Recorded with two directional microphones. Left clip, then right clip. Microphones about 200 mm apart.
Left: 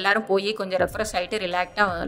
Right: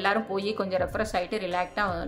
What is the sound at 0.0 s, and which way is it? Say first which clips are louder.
Speech: left 5 dB; 35° left (ahead or behind).